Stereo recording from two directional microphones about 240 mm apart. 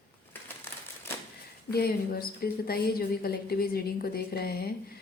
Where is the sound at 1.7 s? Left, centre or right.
Left.